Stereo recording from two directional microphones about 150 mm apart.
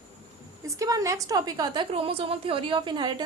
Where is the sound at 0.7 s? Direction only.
20° right (ahead or behind).